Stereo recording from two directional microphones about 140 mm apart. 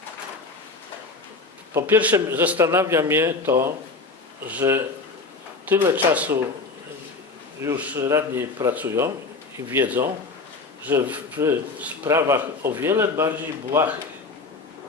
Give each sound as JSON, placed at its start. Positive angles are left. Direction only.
{"t": 1.7, "sound": "a man's voice", "side_deg": -10}
{"t": 7.6, "sound": "a man's voice", "side_deg": -15}